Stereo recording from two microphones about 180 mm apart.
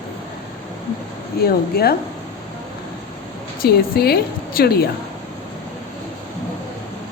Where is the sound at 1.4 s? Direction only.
60° left (ahead or behind).